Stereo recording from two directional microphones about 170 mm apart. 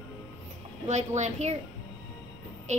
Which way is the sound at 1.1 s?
40° right (ahead or behind).